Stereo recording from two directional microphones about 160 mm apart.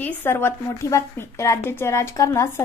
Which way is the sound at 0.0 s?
15° left (ahead or behind).